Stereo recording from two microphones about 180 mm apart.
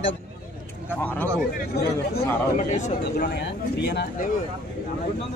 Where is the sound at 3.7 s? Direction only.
65° left (ahead or behind).